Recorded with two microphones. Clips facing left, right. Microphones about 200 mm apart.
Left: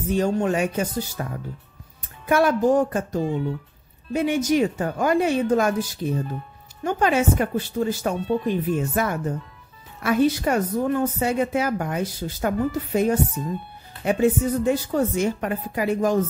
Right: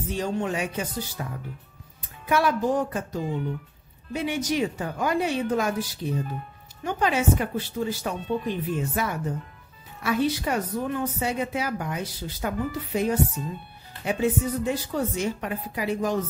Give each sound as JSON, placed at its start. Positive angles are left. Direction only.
{"t": 0.1, "sound": "speech", "side_deg": 50}
{"t": 2.2, "sound": "speech", "side_deg": 50}